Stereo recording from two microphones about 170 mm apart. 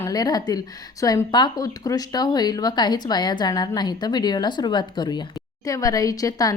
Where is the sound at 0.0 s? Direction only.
20° left (ahead or behind).